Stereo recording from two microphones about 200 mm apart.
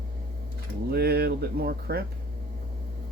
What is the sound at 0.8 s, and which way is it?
Speech, 50° right (ahead or behind).